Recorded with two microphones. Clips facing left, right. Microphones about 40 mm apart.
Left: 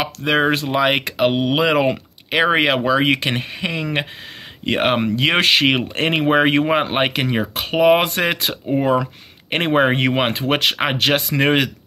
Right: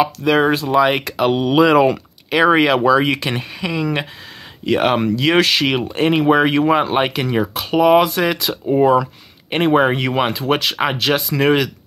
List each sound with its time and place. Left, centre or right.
0.0 s speech: left
1.3 s speech: left
8.8 s speech: left
9.5 s speech: left